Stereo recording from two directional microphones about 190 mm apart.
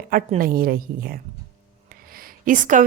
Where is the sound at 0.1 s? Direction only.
45° right (ahead or behind).